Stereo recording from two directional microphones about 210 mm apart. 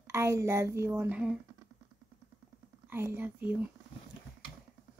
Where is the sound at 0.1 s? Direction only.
15° right (ahead or behind).